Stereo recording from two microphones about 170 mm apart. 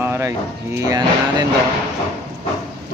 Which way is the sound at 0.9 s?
25° right (ahead or behind).